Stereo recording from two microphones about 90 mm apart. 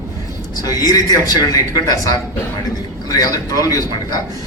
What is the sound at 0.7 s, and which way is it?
Speech, 45° left (ahead or behind).